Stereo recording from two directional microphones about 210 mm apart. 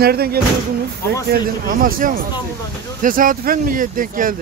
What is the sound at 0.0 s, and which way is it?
Speech, 45° right (ahead or behind).